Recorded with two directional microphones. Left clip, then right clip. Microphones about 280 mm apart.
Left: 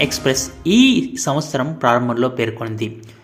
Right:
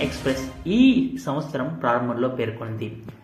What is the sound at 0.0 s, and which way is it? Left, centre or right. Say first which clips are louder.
Speech: left 7 dB; left.